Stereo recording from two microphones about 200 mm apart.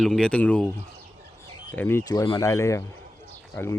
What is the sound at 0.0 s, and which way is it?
Speech, 5° left (ahead or behind).